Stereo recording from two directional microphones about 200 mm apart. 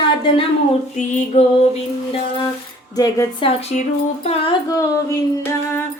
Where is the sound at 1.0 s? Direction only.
40° left (ahead or behind).